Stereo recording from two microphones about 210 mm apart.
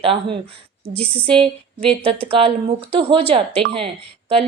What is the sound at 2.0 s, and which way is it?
A woman's voice, 25° right (ahead or behind).